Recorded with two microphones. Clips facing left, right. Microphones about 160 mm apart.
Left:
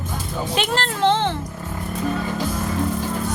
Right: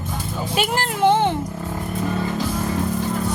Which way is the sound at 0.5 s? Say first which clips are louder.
Right 1 dB; 10° right (ahead or behind).